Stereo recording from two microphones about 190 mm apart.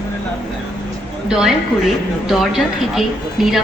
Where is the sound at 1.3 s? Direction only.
5° right (ahead or behind).